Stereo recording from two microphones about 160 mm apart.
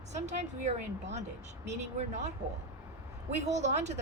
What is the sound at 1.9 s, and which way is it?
Speech, 45° right (ahead or behind).